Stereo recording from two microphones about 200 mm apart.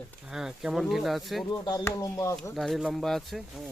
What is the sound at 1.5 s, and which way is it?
Speech, 15° left (ahead or behind).